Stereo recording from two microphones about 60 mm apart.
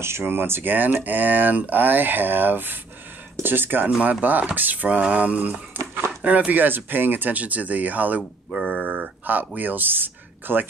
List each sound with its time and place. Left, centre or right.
0.0 s speech: right
3.9 s speech: right
8.6 s a sound: right
9.2 s speech: right